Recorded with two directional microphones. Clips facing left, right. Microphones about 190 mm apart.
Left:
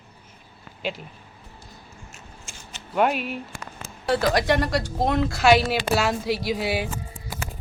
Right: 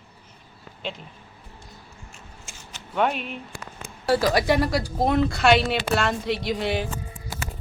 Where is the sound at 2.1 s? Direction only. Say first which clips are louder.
Left 1 dB; 10° right (ahead or behind).